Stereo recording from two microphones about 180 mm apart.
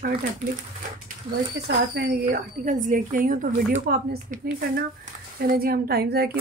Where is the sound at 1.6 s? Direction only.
60° right (ahead or behind).